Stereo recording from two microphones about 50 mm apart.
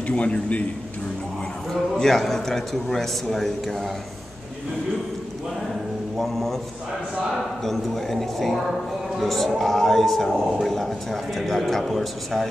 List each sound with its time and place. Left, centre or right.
0.0 s a man's voice: left
1.7 s speech: centre
6.1 s speech: centre